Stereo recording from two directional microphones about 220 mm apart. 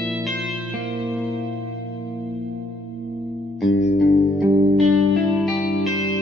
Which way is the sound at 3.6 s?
70° left (ahead or behind).